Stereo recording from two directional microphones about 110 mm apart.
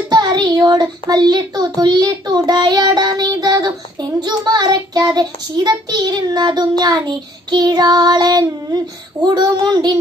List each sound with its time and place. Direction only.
0.1 s a child's voice: 40° right (ahead or behind)